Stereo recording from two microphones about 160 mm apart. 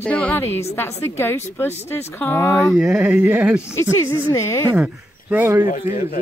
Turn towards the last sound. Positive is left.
turn(degrees=55)  # may be behind; listen again after turning